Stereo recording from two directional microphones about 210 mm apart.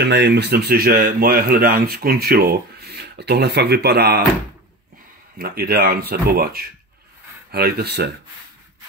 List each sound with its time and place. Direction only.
0.0 s speech: 55° right (ahead or behind)
5.4 s speech: 45° right (ahead or behind)